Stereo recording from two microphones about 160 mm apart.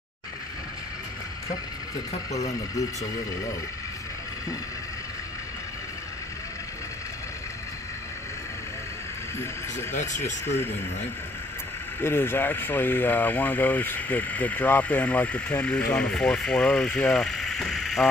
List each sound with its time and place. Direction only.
9.9 s speech: 50° left (ahead or behind)
10.4 s speech: 15° left (ahead or behind)
12.0 s speech: 15° left (ahead or behind)